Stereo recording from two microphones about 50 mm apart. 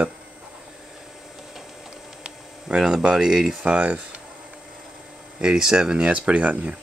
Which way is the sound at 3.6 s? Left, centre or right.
Right.